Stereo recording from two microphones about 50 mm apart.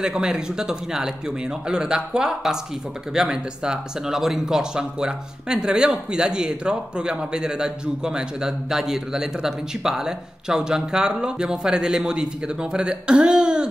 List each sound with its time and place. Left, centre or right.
0.0 s speech: centre